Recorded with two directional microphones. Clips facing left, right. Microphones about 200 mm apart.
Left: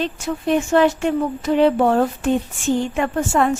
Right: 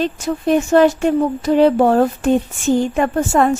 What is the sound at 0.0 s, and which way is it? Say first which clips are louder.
Speech: right 4 dB; 40° right (ahead or behind).